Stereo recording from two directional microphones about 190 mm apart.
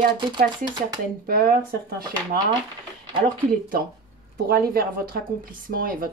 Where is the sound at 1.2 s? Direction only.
50° right (ahead or behind).